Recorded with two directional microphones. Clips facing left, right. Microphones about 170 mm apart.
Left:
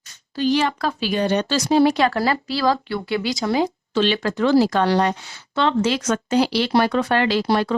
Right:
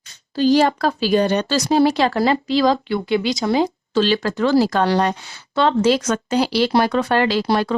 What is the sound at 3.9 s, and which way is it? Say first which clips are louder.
Speech: right 2 dB; 40° right (ahead or behind).